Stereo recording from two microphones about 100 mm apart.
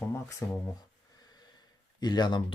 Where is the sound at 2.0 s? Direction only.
45° left (ahead or behind).